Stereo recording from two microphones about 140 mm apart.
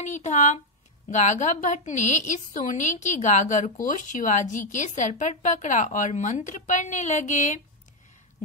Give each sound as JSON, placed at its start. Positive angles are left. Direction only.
{"t": 0.0, "sound": "a woman's voice", "side_deg": 60}